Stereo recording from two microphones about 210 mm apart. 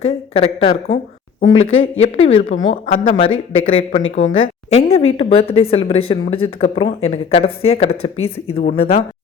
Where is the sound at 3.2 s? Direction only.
70° left (ahead or behind).